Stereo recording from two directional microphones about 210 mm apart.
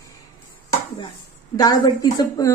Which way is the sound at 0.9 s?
20° left (ahead or behind).